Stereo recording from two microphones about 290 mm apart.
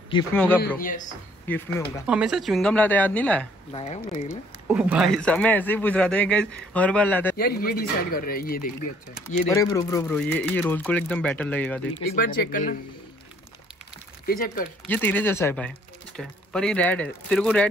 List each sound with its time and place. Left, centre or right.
0.1 s speech: centre
0.6 s speech: left
1.5 s speech: centre
3.7 s speech: left
4.6 s speech: centre
7.3 s speech: left
9.1 s speech: centre
12.2 s speech: left
14.2 s speech: left
14.9 s speech: centre